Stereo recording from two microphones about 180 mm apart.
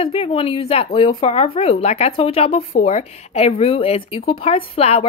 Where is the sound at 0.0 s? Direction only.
35° left (ahead or behind).